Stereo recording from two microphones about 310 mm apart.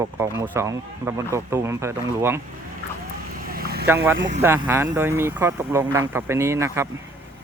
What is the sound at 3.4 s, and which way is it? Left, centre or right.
Vehicle, right.